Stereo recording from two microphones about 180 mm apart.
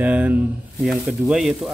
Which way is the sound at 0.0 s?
10° right (ahead or behind).